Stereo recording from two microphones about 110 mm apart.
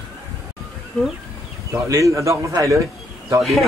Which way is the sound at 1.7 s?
30° right (ahead or behind).